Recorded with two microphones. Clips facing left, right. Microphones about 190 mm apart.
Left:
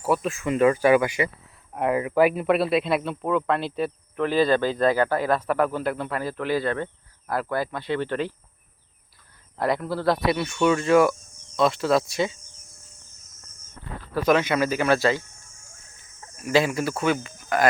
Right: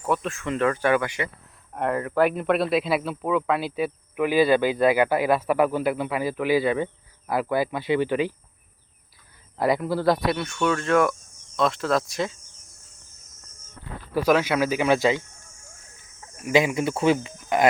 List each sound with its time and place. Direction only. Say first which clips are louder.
0.0 s speech: left 2 dB; 5° left (ahead or behind)
9.6 s speech: right 2 dB; 5° right (ahead or behind)
14.1 s speech: even; 10° right (ahead or behind)
16.4 s speech: right 1 dB; 15° right (ahead or behind)